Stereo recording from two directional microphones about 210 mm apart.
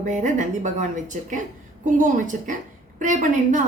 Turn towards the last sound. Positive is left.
turn(degrees=-35)  # may be behind; listen again after turning